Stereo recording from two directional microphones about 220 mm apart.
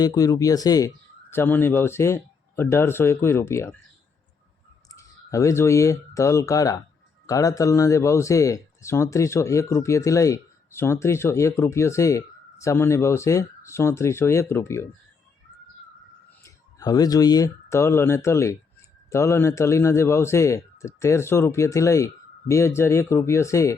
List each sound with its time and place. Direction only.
0.0 s speech: 15° left (ahead or behind)
4.9 s speech: 15° left (ahead or behind)
16.4 s speech: 15° left (ahead or behind)